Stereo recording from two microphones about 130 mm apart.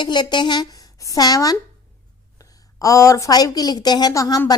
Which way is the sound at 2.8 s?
25° left (ahead or behind).